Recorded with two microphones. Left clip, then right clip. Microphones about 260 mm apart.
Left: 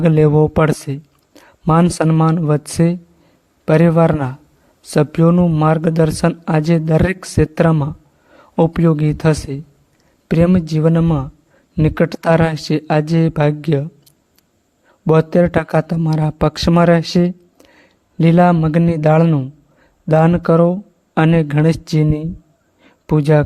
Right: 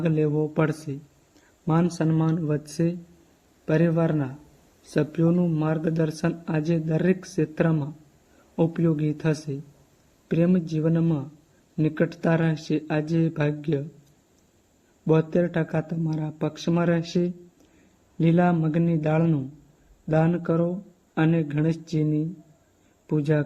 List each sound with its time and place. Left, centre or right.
0.0 s speech: left
15.0 s speech: left